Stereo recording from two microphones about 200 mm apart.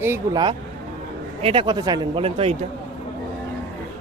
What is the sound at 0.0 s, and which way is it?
Speech, 10° right (ahead or behind).